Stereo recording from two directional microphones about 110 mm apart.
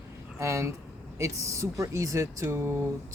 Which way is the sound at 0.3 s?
25° right (ahead or behind).